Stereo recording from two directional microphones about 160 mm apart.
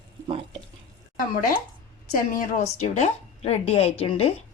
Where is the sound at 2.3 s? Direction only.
55° left (ahead or behind).